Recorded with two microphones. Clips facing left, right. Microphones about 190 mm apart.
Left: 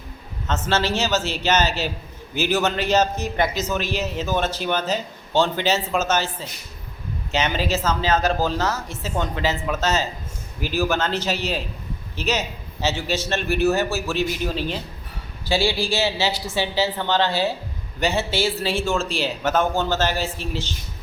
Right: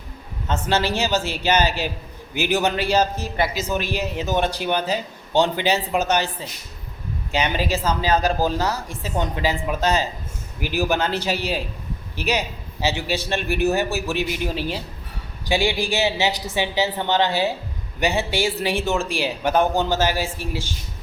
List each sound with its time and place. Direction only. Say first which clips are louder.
0.7 s a man's voice: even; 15° right (ahead or behind)
7.3 s a man's voice: even; 15° right (ahead or behind)